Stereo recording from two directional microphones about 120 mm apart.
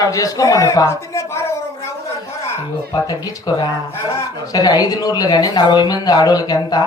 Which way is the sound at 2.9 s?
30° left (ahead or behind).